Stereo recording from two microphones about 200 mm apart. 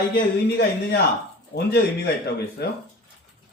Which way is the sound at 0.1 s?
55° left (ahead or behind).